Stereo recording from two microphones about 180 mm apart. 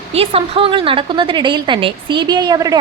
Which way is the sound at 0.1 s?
35° right (ahead or behind).